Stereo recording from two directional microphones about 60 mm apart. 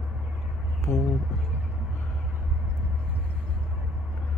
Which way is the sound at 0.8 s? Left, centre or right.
Left.